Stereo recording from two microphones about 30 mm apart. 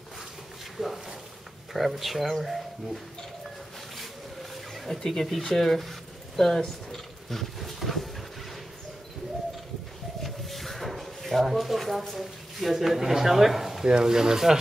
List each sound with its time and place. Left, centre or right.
0.7 s speech: centre
3.4 s a sound: centre
4.9 s speech: centre
6.9 s mechanisms: centre
10.2 s a sound: centre
11.4 s speech: centre